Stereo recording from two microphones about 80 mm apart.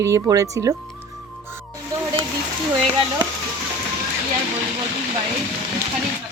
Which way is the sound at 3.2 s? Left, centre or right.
Right.